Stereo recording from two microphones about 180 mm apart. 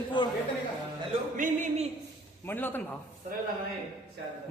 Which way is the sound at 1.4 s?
45° right (ahead or behind).